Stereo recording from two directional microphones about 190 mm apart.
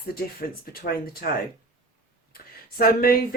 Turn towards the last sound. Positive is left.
turn(degrees=50)  # may be behind; listen again after turning